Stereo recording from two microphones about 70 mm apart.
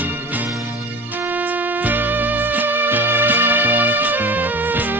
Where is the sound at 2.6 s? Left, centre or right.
Right.